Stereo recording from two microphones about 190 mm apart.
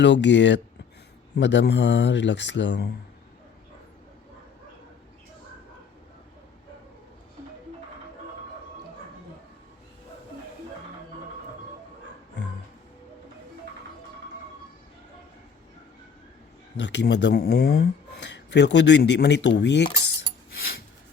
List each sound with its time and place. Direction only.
0.0 s speech: 70° left (ahead or behind)
16.7 s speech: 70° left (ahead or behind)